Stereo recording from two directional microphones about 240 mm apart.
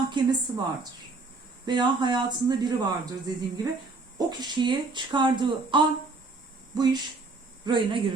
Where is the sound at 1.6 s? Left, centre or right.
Centre.